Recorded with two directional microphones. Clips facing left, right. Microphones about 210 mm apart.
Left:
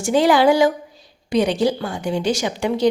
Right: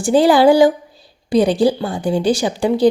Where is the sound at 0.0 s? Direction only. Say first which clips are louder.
Right 4 dB; 35° right (ahead or behind).